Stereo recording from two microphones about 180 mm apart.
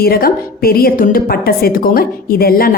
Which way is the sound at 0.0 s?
55° left (ahead or behind).